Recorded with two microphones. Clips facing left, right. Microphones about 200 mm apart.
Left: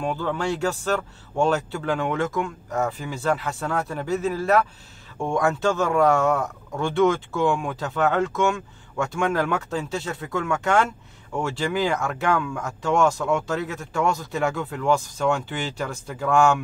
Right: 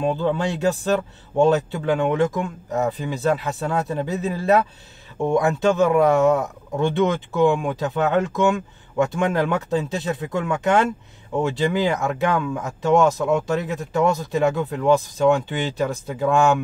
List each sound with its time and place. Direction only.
0.0 s speech: 20° right (ahead or behind)